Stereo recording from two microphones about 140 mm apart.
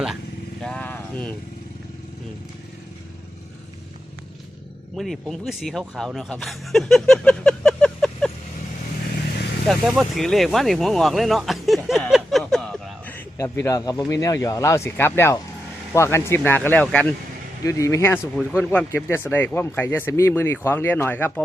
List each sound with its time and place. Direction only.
0.6 s speech: 5° left (ahead or behind)
4.9 s speech: centre (ahead or behind)
9.6 s speech: centre (ahead or behind)
13.1 s a man's voice: 20° left (ahead or behind)
17.6 s a man's voice: 25° left (ahead or behind)